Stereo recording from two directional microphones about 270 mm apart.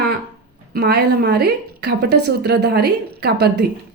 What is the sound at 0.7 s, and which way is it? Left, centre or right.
Speech, right.